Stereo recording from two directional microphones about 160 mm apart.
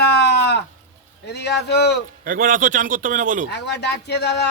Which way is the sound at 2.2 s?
60° right (ahead or behind).